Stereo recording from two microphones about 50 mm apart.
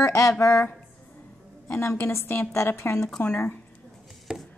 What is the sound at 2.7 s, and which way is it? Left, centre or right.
Speech, left.